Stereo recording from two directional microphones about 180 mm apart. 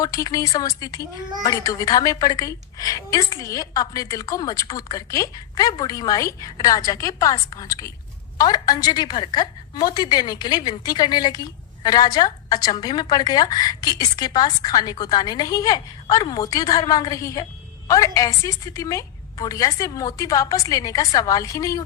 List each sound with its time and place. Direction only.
0.0 s a woman's voice: 20° left (ahead or behind)